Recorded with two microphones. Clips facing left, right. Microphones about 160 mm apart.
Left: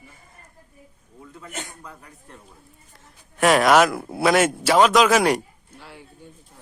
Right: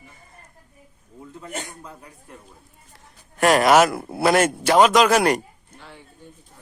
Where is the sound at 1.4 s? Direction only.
25° right (ahead or behind).